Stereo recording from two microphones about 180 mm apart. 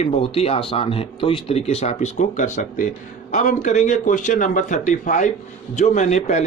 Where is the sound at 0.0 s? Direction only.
30° left (ahead or behind).